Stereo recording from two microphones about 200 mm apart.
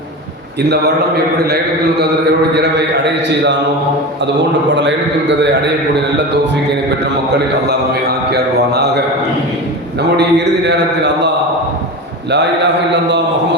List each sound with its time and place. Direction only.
0.7 s speech: 55° right (ahead or behind)
2.6 s speech: 60° right (ahead or behind)
4.7 s speech: 65° right (ahead or behind)
7.3 s speech: 55° right (ahead or behind)
10.2 s speech: 60° right (ahead or behind)
12.3 s speech: 60° right (ahead or behind)